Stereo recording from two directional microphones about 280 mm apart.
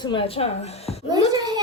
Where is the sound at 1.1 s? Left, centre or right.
Centre.